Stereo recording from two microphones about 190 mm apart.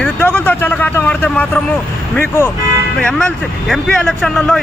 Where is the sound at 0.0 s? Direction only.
5° left (ahead or behind).